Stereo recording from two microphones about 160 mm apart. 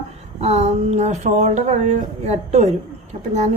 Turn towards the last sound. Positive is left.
turn(degrees=-45)  # may be behind; listen again after turning